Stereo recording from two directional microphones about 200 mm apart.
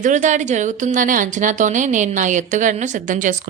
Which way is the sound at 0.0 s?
35° right (ahead or behind).